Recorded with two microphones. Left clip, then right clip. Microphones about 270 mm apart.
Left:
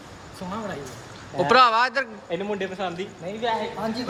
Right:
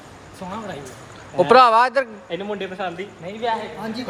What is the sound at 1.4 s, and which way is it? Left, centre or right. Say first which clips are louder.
Speech: right 4 dB; centre.